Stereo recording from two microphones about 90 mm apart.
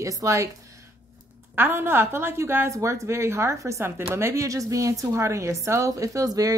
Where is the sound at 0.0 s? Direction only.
35° right (ahead or behind).